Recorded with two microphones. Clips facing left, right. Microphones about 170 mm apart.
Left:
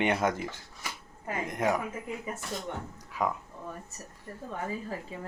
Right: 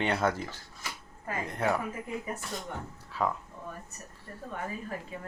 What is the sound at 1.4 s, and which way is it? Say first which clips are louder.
Speech: left 1 dB; 15° left (ahead or behind).